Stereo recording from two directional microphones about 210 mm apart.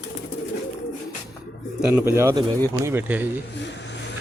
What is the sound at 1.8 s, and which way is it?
Speech, 10° right (ahead or behind).